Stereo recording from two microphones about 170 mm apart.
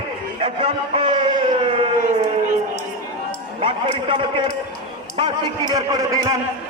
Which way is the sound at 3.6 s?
30° right (ahead or behind).